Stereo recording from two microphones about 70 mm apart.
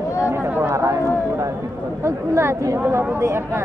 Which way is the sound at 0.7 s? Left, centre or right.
Right.